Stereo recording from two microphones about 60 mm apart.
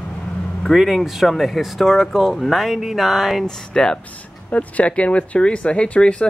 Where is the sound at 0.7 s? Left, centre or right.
Centre.